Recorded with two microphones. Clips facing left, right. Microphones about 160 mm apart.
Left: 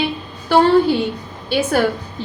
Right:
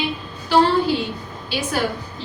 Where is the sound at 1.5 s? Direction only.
55° left (ahead or behind).